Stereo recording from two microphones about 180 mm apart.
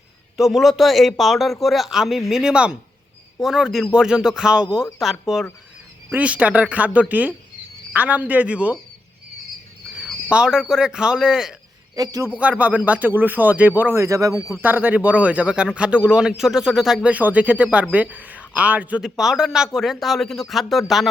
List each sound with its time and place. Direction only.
0.3 s a man's voice: centre (ahead or behind)
10.0 s speech: 5° right (ahead or behind)
11.9 s a man's voice: 20° right (ahead or behind)
12.4 s speech: 10° right (ahead or behind)
14.3 s a man's voice: centre (ahead or behind)
14.6 s a man's voice: 10° right (ahead or behind)